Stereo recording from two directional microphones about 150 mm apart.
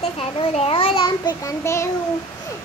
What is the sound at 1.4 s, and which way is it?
Child singing, 20° left (ahead or behind).